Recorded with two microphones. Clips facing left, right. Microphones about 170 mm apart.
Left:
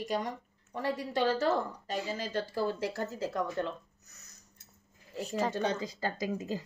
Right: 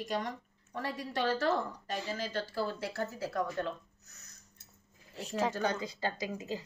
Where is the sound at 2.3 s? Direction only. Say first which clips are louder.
Left 5 dB; 15° left (ahead or behind).